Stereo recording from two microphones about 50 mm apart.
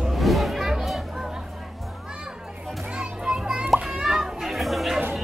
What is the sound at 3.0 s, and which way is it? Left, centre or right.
Children playing, centre.